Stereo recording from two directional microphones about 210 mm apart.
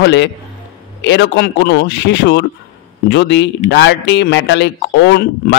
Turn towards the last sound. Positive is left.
turn(degrees=55)  # may be behind; listen again after turning